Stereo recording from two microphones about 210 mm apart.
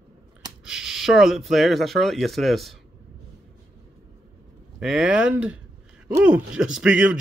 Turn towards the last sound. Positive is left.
turn(degrees=-5)  # may be behind; listen again after turning